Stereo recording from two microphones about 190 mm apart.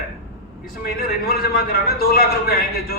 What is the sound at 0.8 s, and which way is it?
A man's voice, 55° left (ahead or behind).